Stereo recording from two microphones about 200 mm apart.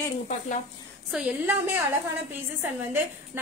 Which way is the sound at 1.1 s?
10° right (ahead or behind).